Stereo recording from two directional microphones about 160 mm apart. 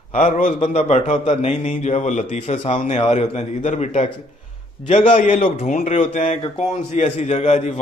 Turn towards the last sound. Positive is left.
turn(degrees=45)  # may be behind; listen again after turning